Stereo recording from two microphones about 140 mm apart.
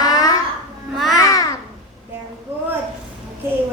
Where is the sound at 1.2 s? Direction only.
25° left (ahead or behind).